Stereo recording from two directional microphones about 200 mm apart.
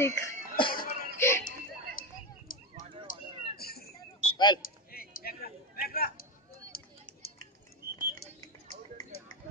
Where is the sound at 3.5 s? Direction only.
50° left (ahead or behind).